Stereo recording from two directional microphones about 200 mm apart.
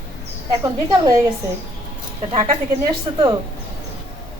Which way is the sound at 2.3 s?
20° right (ahead or behind).